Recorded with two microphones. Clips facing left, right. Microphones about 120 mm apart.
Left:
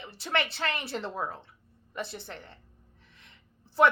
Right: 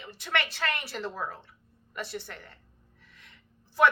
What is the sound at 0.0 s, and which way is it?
A woman's voice, 30° left (ahead or behind).